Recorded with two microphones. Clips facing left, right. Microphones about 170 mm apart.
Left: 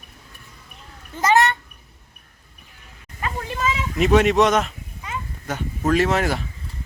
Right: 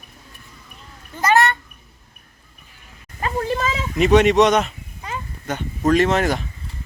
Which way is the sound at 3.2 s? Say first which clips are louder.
Right 3 dB; 35° right (ahead or behind).